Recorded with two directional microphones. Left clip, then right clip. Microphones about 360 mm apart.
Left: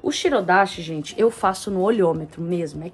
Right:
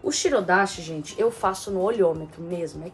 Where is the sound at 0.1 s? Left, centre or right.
Centre.